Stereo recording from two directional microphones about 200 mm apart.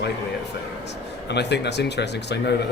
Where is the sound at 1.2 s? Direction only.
60° left (ahead or behind).